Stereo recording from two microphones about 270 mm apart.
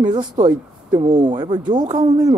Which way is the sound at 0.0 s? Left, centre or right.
Centre.